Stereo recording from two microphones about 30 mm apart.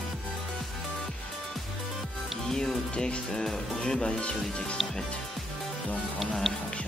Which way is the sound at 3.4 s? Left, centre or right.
Centre.